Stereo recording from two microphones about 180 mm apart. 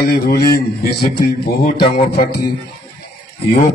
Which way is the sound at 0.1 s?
60° left (ahead or behind).